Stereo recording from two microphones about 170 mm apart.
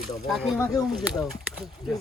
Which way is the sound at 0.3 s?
Centre (ahead or behind).